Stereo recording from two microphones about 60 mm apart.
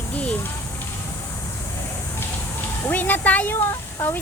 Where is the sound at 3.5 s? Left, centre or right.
Left.